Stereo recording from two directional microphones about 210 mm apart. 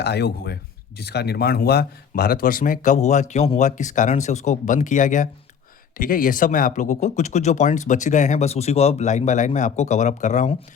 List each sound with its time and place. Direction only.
0.0 s speech: 50° left (ahead or behind); by 10.6 s 35° left (ahead or behind)